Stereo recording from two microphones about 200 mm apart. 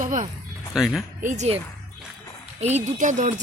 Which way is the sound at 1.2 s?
35° right (ahead or behind).